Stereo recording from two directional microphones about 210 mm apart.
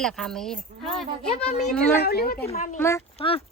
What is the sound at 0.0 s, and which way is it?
Speech, centre (ahead or behind).